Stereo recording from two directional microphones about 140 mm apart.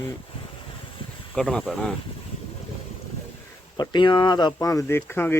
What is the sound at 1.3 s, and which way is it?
Speech, centre (ahead or behind).